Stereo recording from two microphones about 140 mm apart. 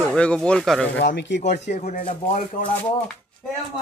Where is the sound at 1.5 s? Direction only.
55° left (ahead or behind); by 2.4 s 75° left (ahead or behind).